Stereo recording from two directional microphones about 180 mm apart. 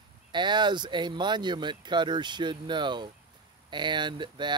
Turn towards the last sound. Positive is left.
turn(degrees=-25)  # may be behind; listen again after turning